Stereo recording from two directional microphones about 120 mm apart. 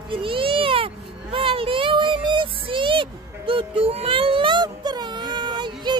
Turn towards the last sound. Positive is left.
turn(degrees=-40)  # may be behind; listen again after turning